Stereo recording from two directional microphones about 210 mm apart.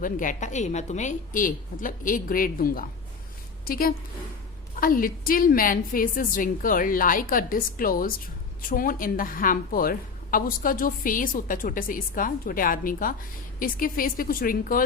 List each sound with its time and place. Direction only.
0.0 s a woman's voice: 40° left (ahead or behind)